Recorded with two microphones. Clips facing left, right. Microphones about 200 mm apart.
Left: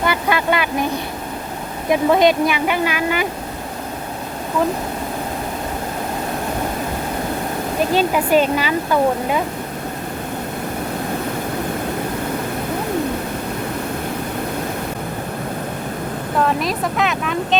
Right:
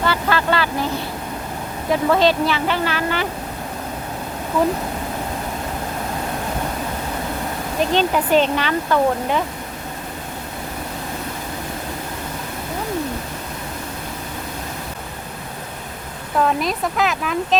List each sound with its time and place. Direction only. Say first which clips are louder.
0.0 s vehicle: left 1 dB; 15° left (ahead or behind)
1.9 s speech: left 2 dB; 15° left (ahead or behind)
7.9 s speech: left 1 dB; 10° left (ahead or behind)
16.4 s speech: even; centre (ahead or behind)